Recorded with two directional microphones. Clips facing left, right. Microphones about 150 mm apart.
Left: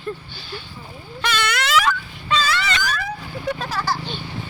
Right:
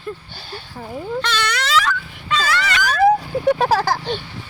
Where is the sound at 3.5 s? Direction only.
80° right.